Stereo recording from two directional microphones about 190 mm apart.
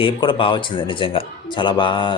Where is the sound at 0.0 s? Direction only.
25° left (ahead or behind).